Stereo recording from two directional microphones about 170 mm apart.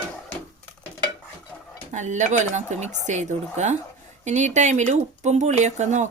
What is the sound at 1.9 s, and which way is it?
Speech, 45° right (ahead or behind).